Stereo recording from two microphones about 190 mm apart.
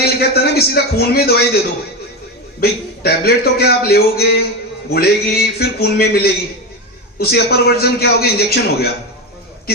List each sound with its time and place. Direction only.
0.2 s a man's voice: 55° left (ahead or behind)
2.6 s a man's voice: 55° left (ahead or behind)